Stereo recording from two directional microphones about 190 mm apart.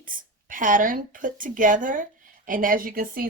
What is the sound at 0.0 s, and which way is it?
A woman's voice, 45° right (ahead or behind).